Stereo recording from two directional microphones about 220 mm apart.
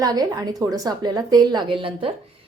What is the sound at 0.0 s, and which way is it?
A woman's voice, 15° right (ahead or behind).